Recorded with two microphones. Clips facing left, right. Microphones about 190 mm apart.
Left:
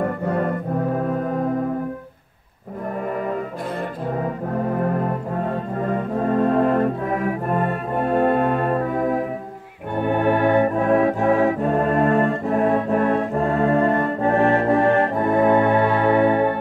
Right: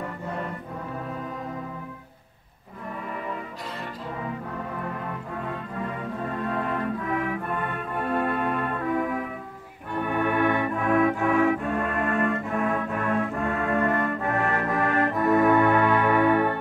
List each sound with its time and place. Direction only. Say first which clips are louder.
0.0 s music: left 10 dB; 55° left (ahead or behind)
4.7 s music: left 11 dB; 45° left (ahead or behind)
9.9 s organ: left 6 dB; 30° left (ahead or behind)